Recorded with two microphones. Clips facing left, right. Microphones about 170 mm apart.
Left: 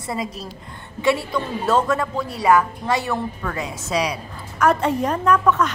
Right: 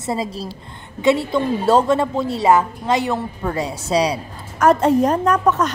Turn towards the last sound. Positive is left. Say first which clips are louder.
# right 1 dB
turn(degrees=-40)  # may be behind; listen again after turning